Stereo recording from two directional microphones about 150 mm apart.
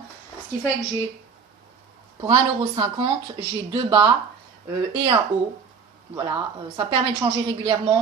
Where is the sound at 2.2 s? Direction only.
40° right (ahead or behind).